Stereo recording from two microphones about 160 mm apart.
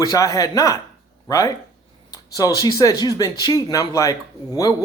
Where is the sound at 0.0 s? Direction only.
20° left (ahead or behind).